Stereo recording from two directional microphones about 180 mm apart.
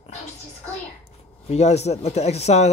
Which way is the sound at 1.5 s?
35° left (ahead or behind).